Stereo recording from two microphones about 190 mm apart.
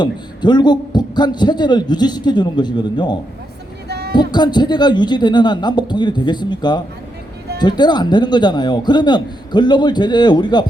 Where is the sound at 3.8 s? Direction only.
60° right (ahead or behind).